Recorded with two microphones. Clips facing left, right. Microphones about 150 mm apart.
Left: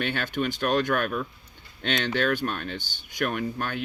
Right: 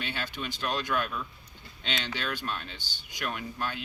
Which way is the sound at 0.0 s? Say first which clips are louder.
Left 8 dB; 55° left (ahead or behind).